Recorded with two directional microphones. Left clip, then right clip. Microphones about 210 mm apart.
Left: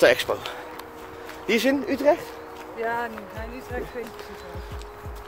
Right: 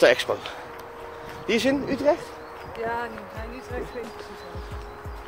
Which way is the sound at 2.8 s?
20° left (ahead or behind).